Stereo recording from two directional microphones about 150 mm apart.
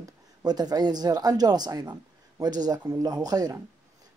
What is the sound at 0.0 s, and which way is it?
Speech, 25° right (ahead or behind).